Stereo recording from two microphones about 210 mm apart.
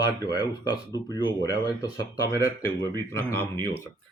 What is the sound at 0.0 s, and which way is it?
A man's voice, 20° left (ahead or behind).